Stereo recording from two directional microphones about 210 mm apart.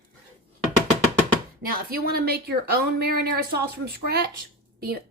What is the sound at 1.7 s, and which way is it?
Speech, 45° right (ahead or behind).